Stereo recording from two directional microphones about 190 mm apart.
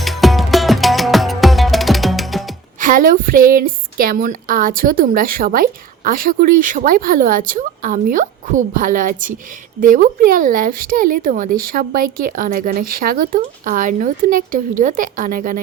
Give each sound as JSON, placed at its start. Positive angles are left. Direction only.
{"t": 0.0, "sound": "music", "side_deg": 0}
{"t": 2.8, "sound": "speech", "side_deg": -45}